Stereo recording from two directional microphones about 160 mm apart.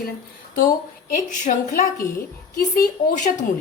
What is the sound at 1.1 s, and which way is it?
A woman's voice, 55° left (ahead or behind).